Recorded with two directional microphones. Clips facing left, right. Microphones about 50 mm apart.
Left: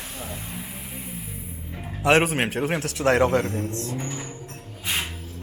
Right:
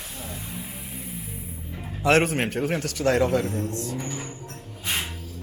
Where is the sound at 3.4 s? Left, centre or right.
Left.